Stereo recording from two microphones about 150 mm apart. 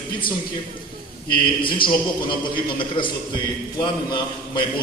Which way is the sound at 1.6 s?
35° left (ahead or behind).